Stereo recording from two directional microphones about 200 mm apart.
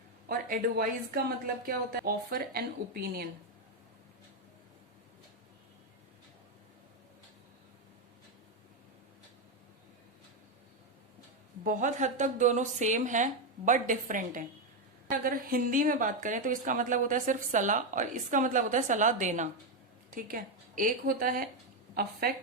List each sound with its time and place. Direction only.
0.3 s a woman's voice: 45° right (ahead or behind)
11.6 s a woman's voice: 40° right (ahead or behind)